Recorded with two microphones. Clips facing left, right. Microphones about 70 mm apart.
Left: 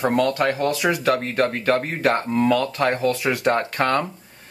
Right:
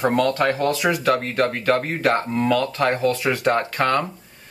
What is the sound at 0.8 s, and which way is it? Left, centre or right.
Speech, centre.